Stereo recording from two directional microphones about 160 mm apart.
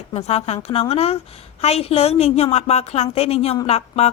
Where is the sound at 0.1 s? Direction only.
40° left (ahead or behind).